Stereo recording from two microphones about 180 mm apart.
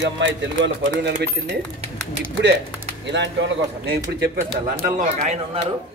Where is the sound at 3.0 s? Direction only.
80° right.